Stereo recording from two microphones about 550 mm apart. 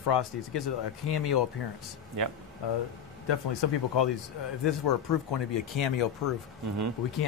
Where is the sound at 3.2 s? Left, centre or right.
Left.